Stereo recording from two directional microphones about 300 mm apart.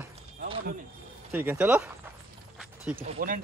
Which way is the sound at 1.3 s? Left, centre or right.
Centre.